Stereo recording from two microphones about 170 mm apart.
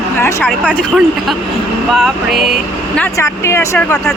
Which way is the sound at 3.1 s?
15° left (ahead or behind).